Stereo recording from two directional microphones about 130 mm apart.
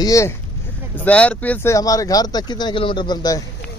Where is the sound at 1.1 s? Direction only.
10° left (ahead or behind).